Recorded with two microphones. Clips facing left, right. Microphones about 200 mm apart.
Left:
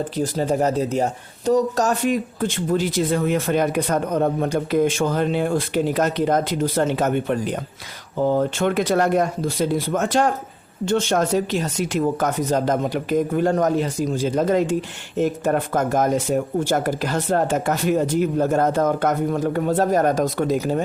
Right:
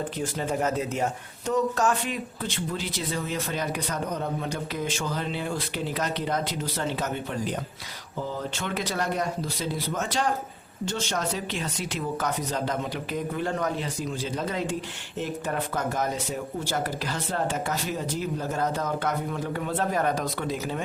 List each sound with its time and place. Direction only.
0.2 s speech: 35° left (ahead or behind)